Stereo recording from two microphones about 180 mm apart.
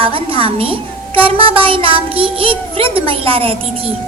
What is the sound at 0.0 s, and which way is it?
A woman's voice, 30° right (ahead or behind).